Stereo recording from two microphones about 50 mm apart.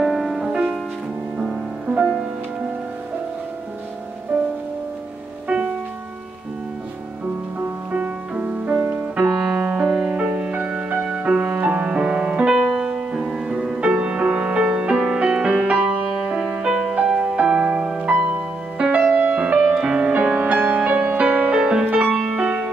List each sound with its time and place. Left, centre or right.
0.0 s music: centre
2.0 s music: right
5.5 s music: right
7.9 s music: right
8.7 s music: right
9.3 s music: centre
10.1 s music: right
11.9 s music: centre
13.7 s music: right
16.2 s music: centre
20.2 s music: right
22.3 s music: centre